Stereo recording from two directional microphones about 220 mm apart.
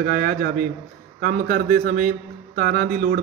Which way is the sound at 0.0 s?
40° right (ahead or behind).